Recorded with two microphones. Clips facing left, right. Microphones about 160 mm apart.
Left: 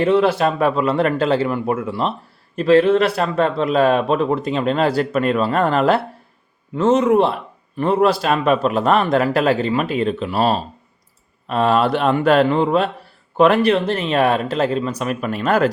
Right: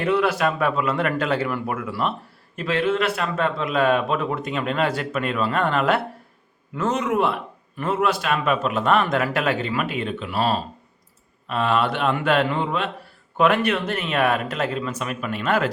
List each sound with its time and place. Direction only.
0.0 s a man's voice: 30° left (ahead or behind)